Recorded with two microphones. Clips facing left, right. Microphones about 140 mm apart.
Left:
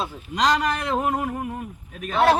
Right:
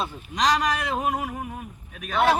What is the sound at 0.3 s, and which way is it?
A man's voice, 65° left (ahead or behind).